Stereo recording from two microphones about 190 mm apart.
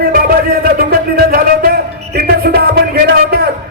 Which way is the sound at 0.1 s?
50° right (ahead or behind).